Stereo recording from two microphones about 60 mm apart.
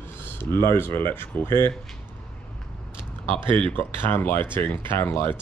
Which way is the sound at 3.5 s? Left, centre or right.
Left.